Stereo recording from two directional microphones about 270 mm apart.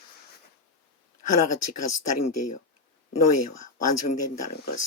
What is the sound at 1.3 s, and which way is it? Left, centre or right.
Speech, left.